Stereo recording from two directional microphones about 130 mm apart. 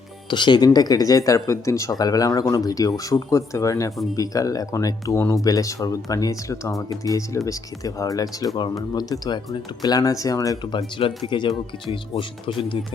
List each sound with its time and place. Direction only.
0.3 s speech: 35° left (ahead or behind)
10.8 s speech: 40° left (ahead or behind)